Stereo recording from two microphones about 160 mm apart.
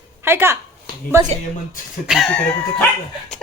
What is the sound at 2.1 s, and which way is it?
Speech, 5° left (ahead or behind).